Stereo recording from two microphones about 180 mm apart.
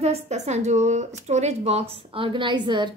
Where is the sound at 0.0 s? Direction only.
35° right (ahead or behind).